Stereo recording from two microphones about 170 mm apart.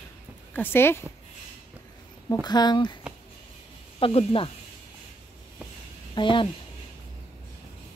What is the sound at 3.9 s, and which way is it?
Speech, 30° left (ahead or behind).